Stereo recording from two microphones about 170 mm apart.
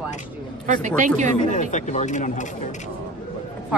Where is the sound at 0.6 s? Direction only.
45° right (ahead or behind).